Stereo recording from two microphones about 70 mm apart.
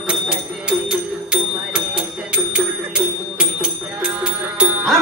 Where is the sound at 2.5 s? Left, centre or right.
Centre.